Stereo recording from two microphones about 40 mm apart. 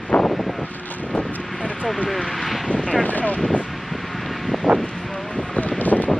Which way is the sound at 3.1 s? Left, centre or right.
Left.